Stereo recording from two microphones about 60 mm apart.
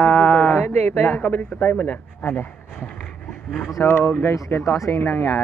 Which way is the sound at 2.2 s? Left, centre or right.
Left.